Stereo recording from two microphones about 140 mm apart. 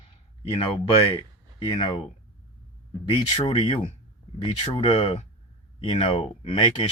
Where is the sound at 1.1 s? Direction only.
40° left (ahead or behind).